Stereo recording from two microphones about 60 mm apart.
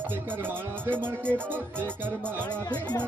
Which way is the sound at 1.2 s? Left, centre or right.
Centre.